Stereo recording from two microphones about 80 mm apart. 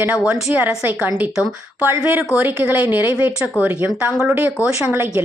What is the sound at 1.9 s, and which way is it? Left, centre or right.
Speech, right.